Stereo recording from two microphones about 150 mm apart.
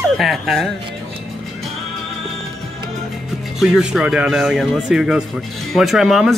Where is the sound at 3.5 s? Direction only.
5° right (ahead or behind).